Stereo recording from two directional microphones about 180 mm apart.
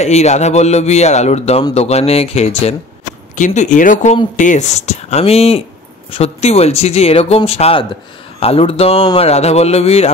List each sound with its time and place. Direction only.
0.0 s a man's voice: 40° left (ahead or behind)